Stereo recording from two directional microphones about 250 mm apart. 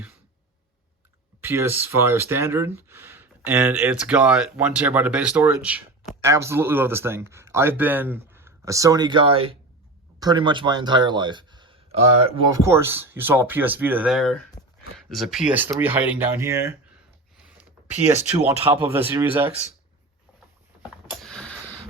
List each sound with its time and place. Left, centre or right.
1.4 s speech: centre
12.6 s speech: centre
18.3 s speech: centre
18.8 s speech: centre
21.2 s a sound: centre